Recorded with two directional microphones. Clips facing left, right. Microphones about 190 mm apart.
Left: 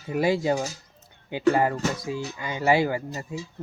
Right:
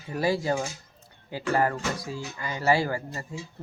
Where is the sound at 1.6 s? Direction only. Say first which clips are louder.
Left 2 dB; 20° left (ahead or behind).